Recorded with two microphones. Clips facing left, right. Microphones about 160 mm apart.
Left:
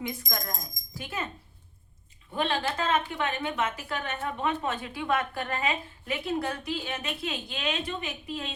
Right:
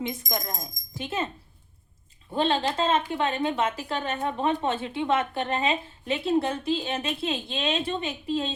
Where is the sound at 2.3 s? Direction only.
25° right (ahead or behind).